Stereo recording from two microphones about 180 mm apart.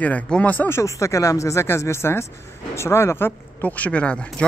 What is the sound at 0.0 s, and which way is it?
Speech, 10° left (ahead or behind).